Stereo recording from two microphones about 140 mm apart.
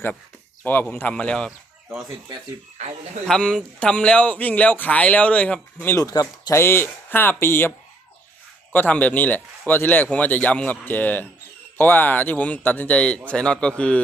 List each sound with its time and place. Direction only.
0.6 s speech: 15° left (ahead or behind)
3.2 s speech: 5° left (ahead or behind); by 6.6 s 30° left (ahead or behind)
6.6 s speech: 15° left (ahead or behind)
8.7 s speech: 10° left (ahead or behind)